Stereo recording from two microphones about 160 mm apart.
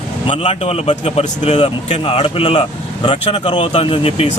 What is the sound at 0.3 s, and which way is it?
A man's voice, 40° left (ahead or behind).